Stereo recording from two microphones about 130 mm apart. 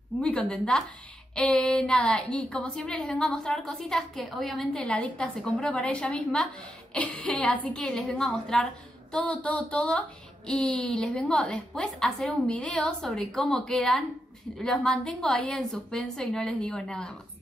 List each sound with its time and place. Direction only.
0.2 s a woman's voice: 10° left (ahead or behind)